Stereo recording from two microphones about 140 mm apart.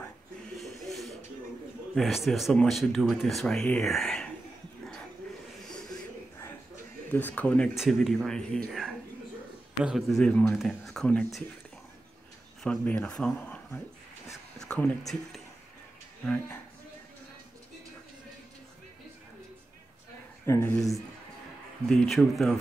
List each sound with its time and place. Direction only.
0.6 s a sound: centre (ahead or behind)
2.0 s speech: centre (ahead or behind)
5.7 s a sound: 5° left (ahead or behind)
7.1 s speech: 15° left (ahead or behind)
12.6 s speech: 5° left (ahead or behind)
20.4 s speech: 20° left (ahead or behind)
21.8 s speech: 5° left (ahead or behind)